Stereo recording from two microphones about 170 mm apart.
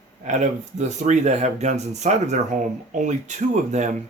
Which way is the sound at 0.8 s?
45° right (ahead or behind).